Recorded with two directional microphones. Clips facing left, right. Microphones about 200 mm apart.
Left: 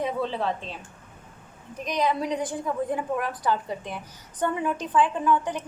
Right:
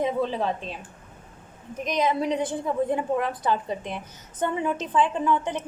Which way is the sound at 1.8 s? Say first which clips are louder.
Right 1 dB; 20° right (ahead or behind).